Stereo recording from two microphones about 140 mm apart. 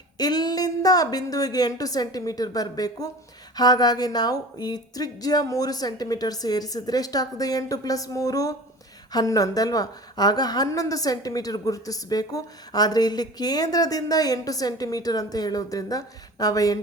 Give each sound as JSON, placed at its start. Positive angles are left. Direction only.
{"t": 0.2, "sound": "a woman's voice", "side_deg": 30}